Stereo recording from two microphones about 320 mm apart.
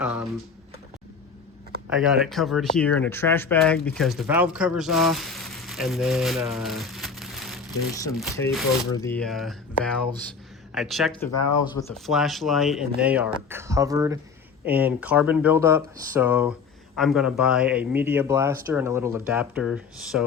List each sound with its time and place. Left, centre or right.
0.0 s speech: centre
1.9 s speech: centre
11.3 s speech: left
11.8 s speech: centre